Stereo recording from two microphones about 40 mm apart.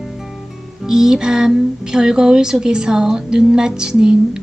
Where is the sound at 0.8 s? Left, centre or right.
Centre.